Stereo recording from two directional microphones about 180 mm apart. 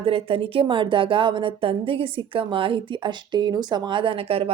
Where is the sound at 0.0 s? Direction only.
30° right (ahead or behind).